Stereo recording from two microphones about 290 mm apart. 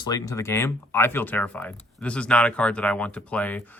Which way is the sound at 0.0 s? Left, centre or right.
Centre.